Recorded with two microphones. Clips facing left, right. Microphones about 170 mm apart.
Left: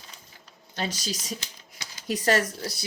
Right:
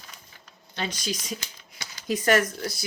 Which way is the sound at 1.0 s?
35° left (ahead or behind).